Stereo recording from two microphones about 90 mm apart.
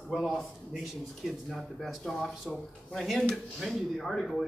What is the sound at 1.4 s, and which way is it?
A man's voice, centre (ahead or behind).